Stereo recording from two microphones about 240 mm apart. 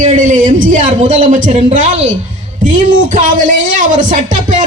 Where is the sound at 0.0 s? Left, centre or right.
Right.